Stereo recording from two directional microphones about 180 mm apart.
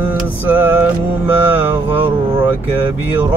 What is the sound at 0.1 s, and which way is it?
Mantra, 10° right (ahead or behind).